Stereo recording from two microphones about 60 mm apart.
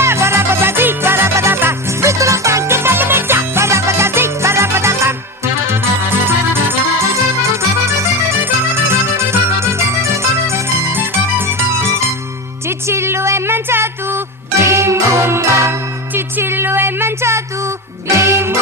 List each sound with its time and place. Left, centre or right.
0.0 s music: right
14.6 s jingle: right
16.1 s a sound: right
18.1 s music: right